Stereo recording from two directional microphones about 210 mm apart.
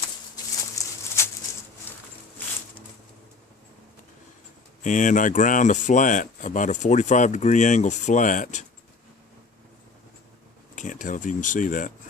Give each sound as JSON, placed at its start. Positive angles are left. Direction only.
{"t": 0.8, "sound": "a sound", "side_deg": 15}
{"t": 1.9, "sound": "music", "side_deg": 10}
{"t": 4.8, "sound": "speech", "side_deg": 35}
{"t": 10.8, "sound": "speech", "side_deg": 35}